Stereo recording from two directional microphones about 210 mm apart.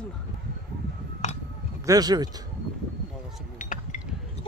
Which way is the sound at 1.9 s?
20° right (ahead or behind).